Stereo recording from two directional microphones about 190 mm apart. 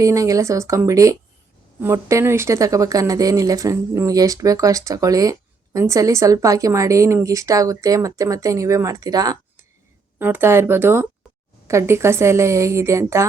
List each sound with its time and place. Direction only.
0.0 s speech: 15° right (ahead or behind)